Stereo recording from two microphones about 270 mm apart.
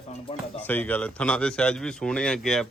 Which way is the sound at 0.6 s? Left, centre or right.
Centre.